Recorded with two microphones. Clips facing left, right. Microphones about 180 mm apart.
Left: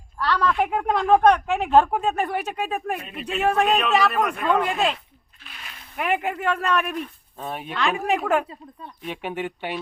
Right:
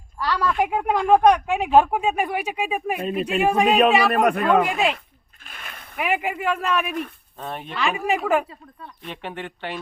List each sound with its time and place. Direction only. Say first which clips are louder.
0.2 s a woman's voice: even; 10° right (ahead or behind)
4.1 s a man's voice: right 5 dB; 60° right (ahead or behind)
4.6 s a woman's voice: right 1 dB; 10° right (ahead or behind)
5.4 s a sound: right 3 dB; 50° right (ahead or behind)
6.0 s speech: even; 5° right (ahead or behind)
9.0 s speech: left 4 dB; 10° left (ahead or behind)